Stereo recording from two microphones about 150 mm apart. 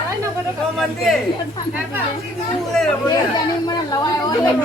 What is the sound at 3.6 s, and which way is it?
Speech, 30° left (ahead or behind).